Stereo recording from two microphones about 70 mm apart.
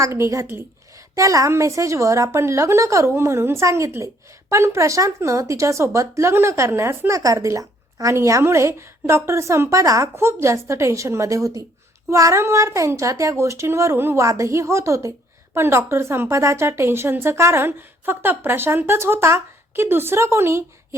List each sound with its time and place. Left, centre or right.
0.0 s a woman's voice: right
7.1 s a woman's voice: right
10.2 s a woman's voice: right
20.1 s a woman's voice: right